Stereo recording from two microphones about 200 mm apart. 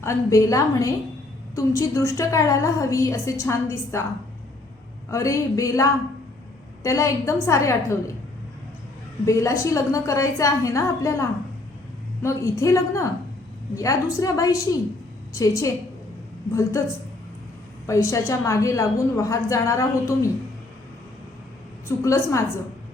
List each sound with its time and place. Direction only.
0.0 s a woman's voice: 15° left (ahead or behind)
5.1 s a woman's voice: 15° left (ahead or behind)
9.2 s a woman's voice: 15° left (ahead or behind)
17.8 s a woman's voice: 15° left (ahead or behind)
21.8 s a woman's voice: 15° left (ahead or behind)